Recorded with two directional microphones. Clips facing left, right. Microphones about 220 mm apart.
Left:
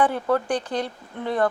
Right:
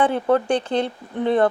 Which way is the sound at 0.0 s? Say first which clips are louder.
Right 3 dB; 25° right (ahead or behind).